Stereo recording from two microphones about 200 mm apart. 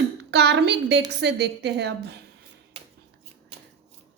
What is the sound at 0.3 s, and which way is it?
A woman's voice, 55° right (ahead or behind).